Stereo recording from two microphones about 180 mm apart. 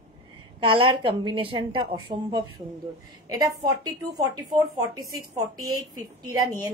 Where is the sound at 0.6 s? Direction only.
30° right (ahead or behind).